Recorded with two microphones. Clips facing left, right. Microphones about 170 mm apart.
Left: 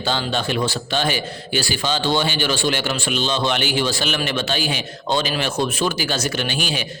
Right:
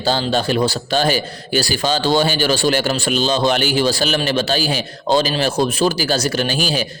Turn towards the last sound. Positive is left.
turn(degrees=-35)  # may be behind; listen again after turning